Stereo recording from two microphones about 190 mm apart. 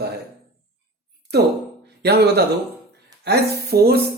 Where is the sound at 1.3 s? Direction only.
60° right (ahead or behind).